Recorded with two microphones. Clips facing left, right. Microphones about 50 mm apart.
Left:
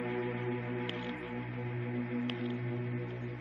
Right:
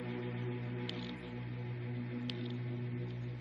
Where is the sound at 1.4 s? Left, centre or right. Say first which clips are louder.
Left 6 dB; left.